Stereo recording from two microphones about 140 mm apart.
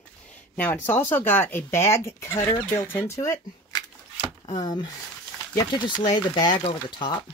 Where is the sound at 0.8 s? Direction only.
15° left (ahead or behind); by 7.2 s 35° left (ahead or behind).